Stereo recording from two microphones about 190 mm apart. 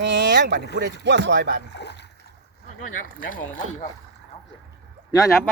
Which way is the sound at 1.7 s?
65° left (ahead or behind).